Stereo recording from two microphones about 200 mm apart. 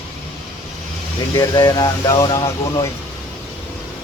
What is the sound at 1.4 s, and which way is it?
Speech, 20° left (ahead or behind).